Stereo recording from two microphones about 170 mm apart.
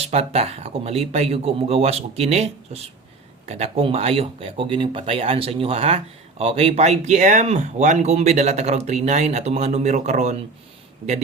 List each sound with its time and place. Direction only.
0.0 s speech: 35° right (ahead or behind)